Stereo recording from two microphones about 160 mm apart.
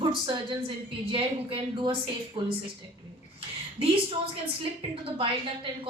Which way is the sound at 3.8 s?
35° right (ahead or behind).